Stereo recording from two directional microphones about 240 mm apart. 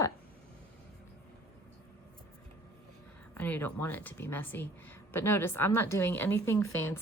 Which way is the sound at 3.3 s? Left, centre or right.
Centre.